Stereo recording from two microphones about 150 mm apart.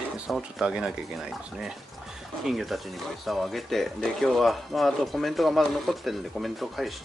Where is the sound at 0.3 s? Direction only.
5° right (ahead or behind).